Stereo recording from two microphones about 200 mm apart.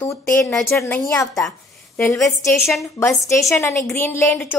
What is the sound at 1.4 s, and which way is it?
A woman's voice, 5° left (ahead or behind).